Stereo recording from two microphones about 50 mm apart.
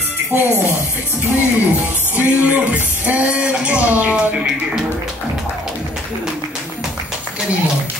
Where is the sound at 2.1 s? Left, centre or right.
Right.